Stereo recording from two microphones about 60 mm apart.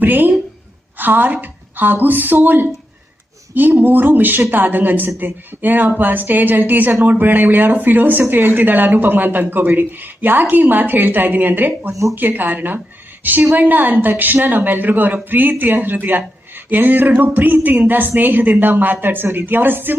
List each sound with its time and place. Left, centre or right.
0.0 s a woman's voice: right